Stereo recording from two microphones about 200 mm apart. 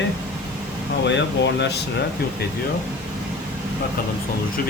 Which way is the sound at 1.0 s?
60° left (ahead or behind).